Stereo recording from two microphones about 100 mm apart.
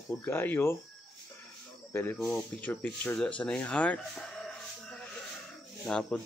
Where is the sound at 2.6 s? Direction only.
15° left (ahead or behind).